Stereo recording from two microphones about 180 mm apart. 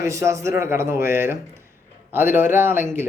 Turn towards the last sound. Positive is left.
turn(degrees=-10)  # may be behind; listen again after turning